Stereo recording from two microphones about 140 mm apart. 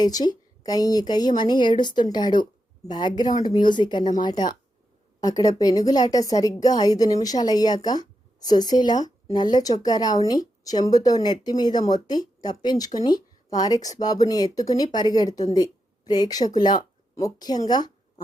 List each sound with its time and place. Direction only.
0.0 s a woman's voice: 30° left (ahead or behind)